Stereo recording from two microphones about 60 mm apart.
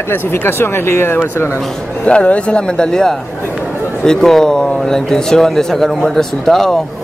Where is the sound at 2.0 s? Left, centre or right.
Left.